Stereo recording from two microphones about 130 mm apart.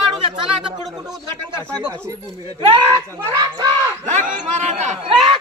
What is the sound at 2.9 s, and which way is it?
Speech, 30° right (ahead or behind).